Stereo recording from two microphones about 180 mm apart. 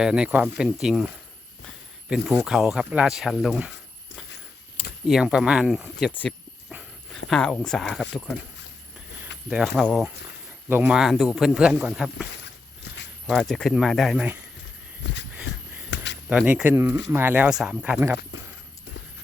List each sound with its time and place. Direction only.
0.0 s speech: 5° right (ahead or behind)
5.0 s speech: 5° right (ahead or behind)
6.1 s speech: 10° left (ahead or behind)
6.7 s dog: 5° right (ahead or behind)
7.3 s speech: centre (ahead or behind)
9.5 s speech: centre (ahead or behind)
15.0 s a sound: 80° left
16.3 s speech: 5° right (ahead or behind)